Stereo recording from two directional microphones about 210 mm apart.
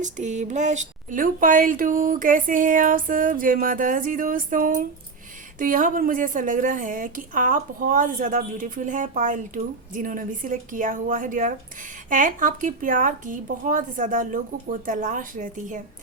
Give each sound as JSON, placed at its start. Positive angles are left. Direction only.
{"t": 0.0, "sound": "speech", "side_deg": -35}